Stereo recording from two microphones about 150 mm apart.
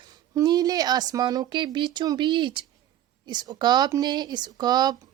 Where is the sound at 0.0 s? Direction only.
30° right (ahead or behind).